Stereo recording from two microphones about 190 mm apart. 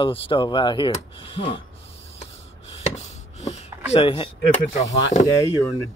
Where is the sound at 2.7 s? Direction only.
35° left (ahead or behind).